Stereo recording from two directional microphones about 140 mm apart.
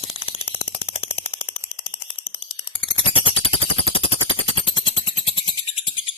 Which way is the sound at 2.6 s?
40° left (ahead or behind).